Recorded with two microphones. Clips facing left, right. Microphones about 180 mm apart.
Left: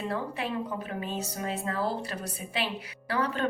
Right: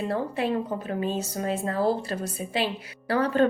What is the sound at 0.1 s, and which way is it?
Speech, 35° right (ahead or behind).